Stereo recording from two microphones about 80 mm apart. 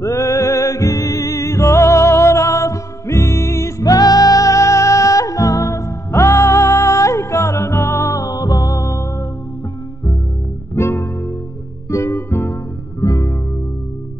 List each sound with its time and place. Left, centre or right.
0.0 s music: left
10.8 s music: left